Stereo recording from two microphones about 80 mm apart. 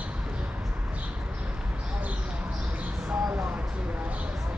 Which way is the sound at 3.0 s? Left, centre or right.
Centre.